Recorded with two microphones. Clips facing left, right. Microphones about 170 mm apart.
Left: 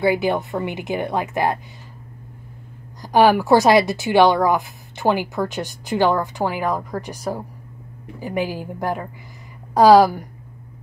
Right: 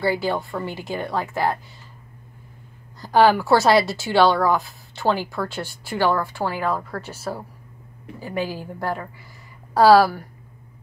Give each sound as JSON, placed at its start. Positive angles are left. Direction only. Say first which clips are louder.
{"t": 0.0, "sound": "a woman's voice", "louder": "left 4 dB", "side_deg": 20}
{"t": 3.0, "sound": "a woman's voice", "louder": "left 1 dB", "side_deg": 15}